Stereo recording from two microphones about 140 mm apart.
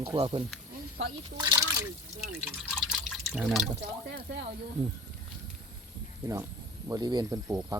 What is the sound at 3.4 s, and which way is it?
Speech, centre (ahead or behind).